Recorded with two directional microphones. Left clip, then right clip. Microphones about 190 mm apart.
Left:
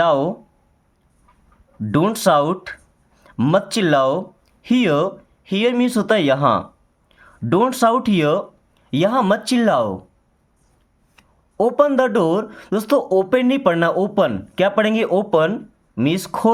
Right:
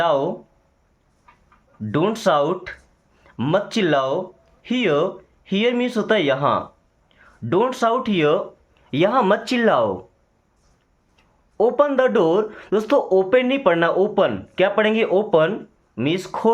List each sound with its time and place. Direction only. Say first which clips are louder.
0.0 s speech: left 3 dB; 55° left (ahead or behind)
1.8 s speech: left 2 dB; 55° left (ahead or behind); by 9.9 s 40° left (ahead or behind)
11.5 s speech: left 2 dB; 50° left (ahead or behind)